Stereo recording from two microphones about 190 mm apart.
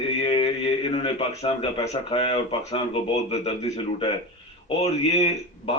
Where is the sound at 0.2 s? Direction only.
30° left (ahead or behind).